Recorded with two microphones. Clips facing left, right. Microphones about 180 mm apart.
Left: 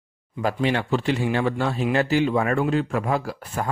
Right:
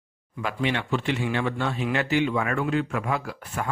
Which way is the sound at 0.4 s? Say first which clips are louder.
Left 4 dB; 40° left (ahead or behind).